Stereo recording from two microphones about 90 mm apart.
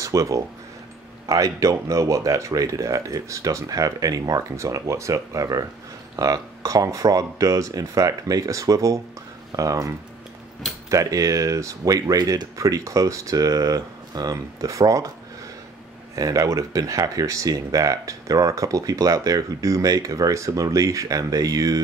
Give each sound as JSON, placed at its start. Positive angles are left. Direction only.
{"t": 0.0, "sound": "speech", "side_deg": -35}
{"t": 16.2, "sound": "speech", "side_deg": -40}